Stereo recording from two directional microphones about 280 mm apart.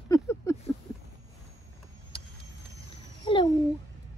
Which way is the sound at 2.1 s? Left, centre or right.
Centre.